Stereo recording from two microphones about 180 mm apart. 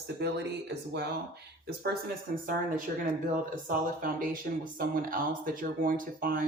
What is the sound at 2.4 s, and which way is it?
Speech, 50° right (ahead or behind).